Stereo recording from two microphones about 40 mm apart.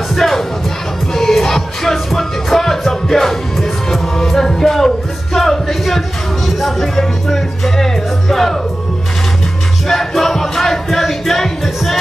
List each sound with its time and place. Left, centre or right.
0.1 s music: centre
9.8 s music: centre